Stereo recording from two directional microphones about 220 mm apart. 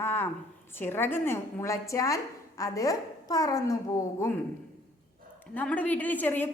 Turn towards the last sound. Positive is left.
turn(degrees=10)  # may be behind; listen again after turning